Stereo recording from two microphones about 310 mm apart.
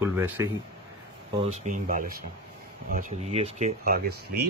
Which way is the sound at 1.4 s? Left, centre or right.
Right.